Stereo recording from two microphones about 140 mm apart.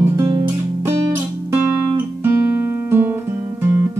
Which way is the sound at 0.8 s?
20° right (ahead or behind).